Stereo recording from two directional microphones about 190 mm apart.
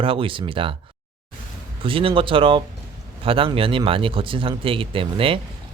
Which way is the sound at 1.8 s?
30° right (ahead or behind).